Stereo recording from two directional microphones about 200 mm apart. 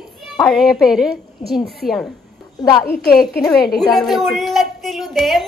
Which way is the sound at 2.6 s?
20° left (ahead or behind).